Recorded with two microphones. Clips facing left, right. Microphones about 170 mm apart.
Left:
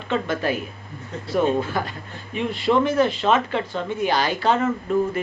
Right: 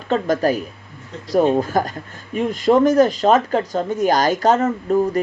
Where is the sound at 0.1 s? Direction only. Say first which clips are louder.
Right 5 dB; 40° right (ahead or behind).